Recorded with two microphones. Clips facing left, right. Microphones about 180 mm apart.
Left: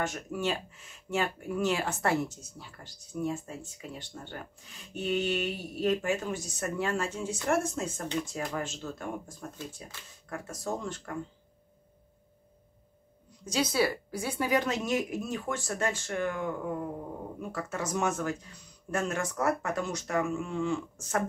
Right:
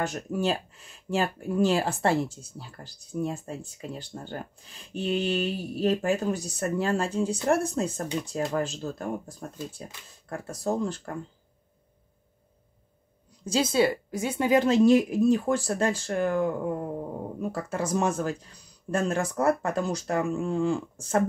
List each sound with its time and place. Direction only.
0.0 s speech: 35° right (ahead or behind)
13.5 s speech: 25° right (ahead or behind)